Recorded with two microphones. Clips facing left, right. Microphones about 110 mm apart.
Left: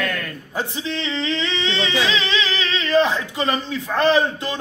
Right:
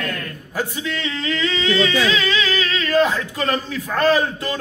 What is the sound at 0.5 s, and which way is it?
Singing, 25° left (ahead or behind).